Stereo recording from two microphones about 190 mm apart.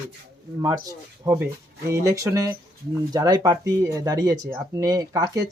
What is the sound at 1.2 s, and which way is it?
Speech, 10° right (ahead or behind).